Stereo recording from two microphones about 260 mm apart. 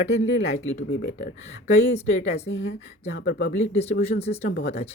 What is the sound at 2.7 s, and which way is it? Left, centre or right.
Speech, left.